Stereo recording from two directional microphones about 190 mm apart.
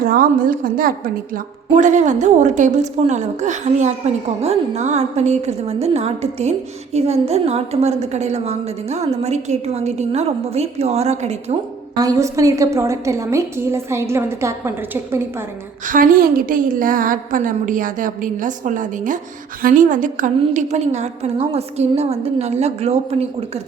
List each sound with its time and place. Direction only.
0.0 s a woman's voice: 50° right (ahead or behind)
11.9 s a woman's voice: 20° right (ahead or behind)
15.9 s a woman's voice: 50° right (ahead or behind); by 23.2 s 35° right (ahead or behind)